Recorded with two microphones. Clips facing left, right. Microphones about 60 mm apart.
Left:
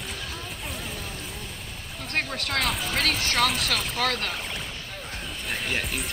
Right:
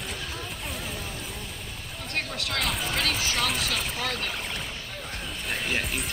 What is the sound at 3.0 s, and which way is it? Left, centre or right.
Speech, left.